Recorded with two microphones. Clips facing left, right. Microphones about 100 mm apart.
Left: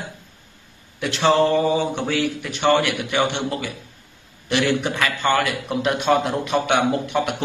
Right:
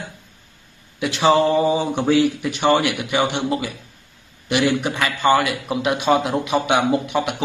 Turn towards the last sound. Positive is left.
turn(degrees=0)  # may be behind; listen again after turning